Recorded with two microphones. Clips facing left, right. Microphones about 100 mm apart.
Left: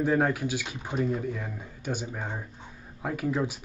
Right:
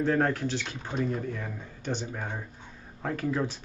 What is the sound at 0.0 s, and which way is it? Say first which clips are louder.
Speech: left 1 dB; 10° left (ahead or behind).